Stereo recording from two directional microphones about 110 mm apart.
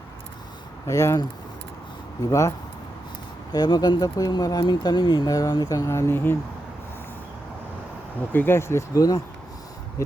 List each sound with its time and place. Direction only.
0.9 s speech: 30° left (ahead or behind)
2.2 s speech: 30° left (ahead or behind)
3.5 s speech: 40° left (ahead or behind); by 6.3 s 20° left (ahead or behind)
8.3 s speech: 20° left (ahead or behind)